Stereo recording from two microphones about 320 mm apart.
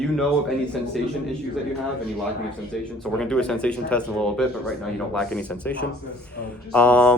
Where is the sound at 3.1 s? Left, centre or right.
Centre.